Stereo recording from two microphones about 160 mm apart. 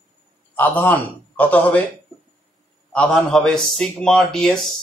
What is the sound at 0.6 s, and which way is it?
Speech, 10° left (ahead or behind).